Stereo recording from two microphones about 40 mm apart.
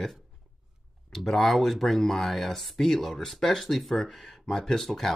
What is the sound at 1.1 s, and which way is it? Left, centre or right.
Speech, centre.